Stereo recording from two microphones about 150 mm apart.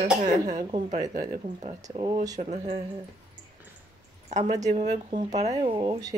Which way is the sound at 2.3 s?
50° right (ahead or behind).